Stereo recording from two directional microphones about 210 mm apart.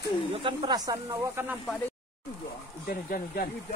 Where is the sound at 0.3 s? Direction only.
25° right (ahead or behind).